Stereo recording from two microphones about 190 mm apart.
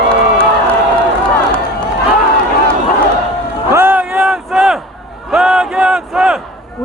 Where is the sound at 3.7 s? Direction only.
10° right (ahead or behind).